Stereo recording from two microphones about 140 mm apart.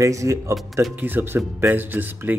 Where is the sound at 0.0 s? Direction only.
20° right (ahead or behind).